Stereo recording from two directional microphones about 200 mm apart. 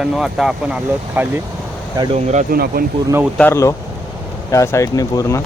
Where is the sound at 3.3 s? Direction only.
10° left (ahead or behind).